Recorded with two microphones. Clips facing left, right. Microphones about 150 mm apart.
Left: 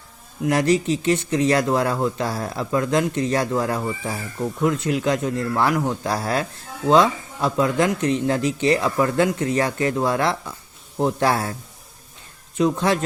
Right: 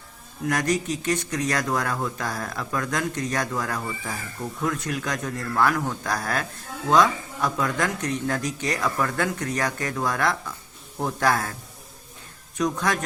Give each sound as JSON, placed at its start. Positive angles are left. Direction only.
{"t": 0.4, "sound": "speech", "side_deg": 25}
{"t": 12.5, "sound": "speech", "side_deg": 25}